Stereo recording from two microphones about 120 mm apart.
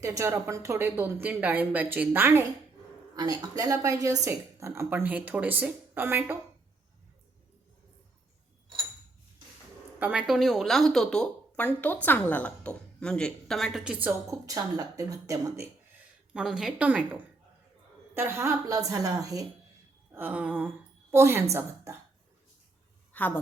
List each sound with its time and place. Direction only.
0.0 s a woman's voice: 25° right (ahead or behind)
3.2 s a woman's voice: 30° right (ahead or behind)
10.0 s speech: 10° right (ahead or behind)
14.3 s a woman's voice: 30° right (ahead or behind)
16.3 s a woman's voice: 5° right (ahead or behind)
18.1 s a woman's voice: 20° right (ahead or behind)
20.1 s a woman's voice: 15° right (ahead or behind)
23.1 s a woman's voice: 15° left (ahead or behind)